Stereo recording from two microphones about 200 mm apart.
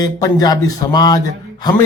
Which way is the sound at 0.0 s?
20° left (ahead or behind).